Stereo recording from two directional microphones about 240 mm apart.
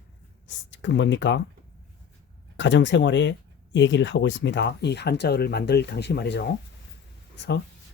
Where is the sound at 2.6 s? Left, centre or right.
Left.